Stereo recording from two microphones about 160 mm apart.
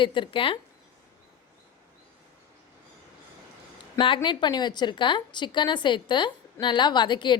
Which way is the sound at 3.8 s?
30° left (ahead or behind).